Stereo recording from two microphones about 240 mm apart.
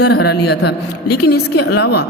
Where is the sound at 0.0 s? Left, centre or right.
Left.